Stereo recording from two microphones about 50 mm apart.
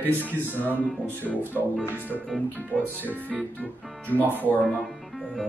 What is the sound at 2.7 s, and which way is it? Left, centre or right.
Music, centre.